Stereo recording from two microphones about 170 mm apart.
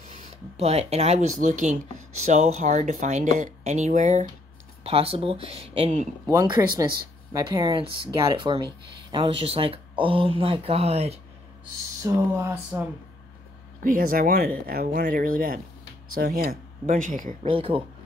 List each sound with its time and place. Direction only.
0.6 s speech: 40° right (ahead or behind)
6.2 s speech: 20° right (ahead or behind)
12.0 s speech: 15° right (ahead or behind)
13.8 s speech: 55° right (ahead or behind)
17.4 s speech: 35° right (ahead or behind)